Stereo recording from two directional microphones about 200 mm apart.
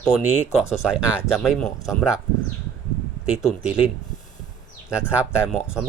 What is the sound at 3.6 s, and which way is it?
Speech, 30° left (ahead or behind).